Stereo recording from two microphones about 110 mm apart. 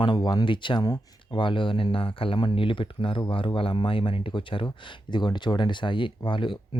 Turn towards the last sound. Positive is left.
turn(degrees=50)  # may be behind; listen again after turning